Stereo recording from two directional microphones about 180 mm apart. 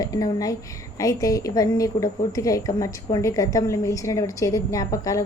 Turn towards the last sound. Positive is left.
turn(degrees=20)  # may be behind; listen again after turning